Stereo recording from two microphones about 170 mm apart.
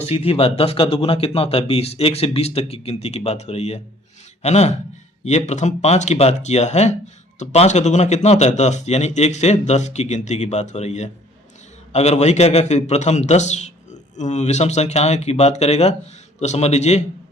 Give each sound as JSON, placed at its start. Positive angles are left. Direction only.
{"t": 0.0, "sound": "a man's voice", "side_deg": 35}